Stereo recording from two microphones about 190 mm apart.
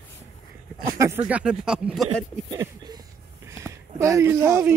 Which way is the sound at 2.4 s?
20° right (ahead or behind).